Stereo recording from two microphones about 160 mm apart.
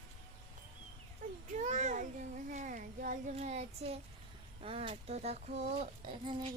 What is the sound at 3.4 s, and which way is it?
Speech, 40° right (ahead or behind).